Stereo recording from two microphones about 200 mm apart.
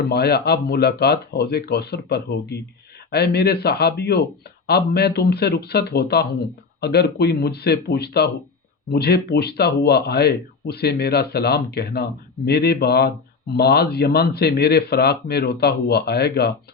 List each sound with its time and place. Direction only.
0.1 s speech: 55° left (ahead or behind)